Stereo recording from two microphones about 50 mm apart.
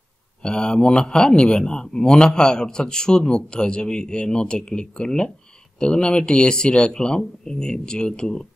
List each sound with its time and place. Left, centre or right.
0.4 s a man's voice: centre